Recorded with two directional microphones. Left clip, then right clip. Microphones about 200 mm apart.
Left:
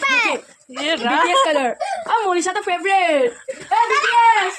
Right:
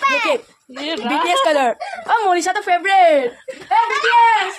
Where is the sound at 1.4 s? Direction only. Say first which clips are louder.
Right 3 dB; 60° right (ahead or behind).